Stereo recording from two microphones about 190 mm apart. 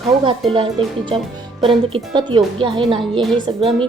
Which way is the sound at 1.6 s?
30° right (ahead or behind).